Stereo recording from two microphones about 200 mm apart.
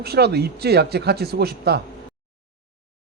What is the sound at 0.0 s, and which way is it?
A man's voice, 55° right (ahead or behind).